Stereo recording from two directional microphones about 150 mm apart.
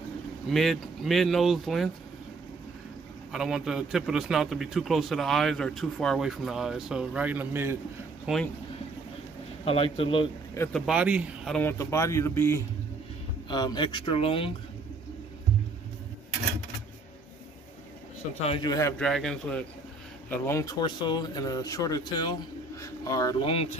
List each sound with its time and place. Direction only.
0.5 s a man's voice: centre (ahead or behind)
3.3 s a man's voice: centre (ahead or behind)
9.7 s speech: 35° left (ahead or behind)
10.7 s speech: 5° right (ahead or behind)
11.5 s speech: 15° left (ahead or behind)
13.5 s speech: 30° left (ahead or behind)
18.6 s speech: 25° left (ahead or behind)
18.9 s a man's voice: 5° left (ahead or behind)
20.2 s speech: 20° left (ahead or behind)
23.3 s speech: 40° left (ahead or behind)